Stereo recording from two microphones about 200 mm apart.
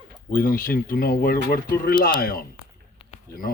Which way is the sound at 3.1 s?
45° left (ahead or behind).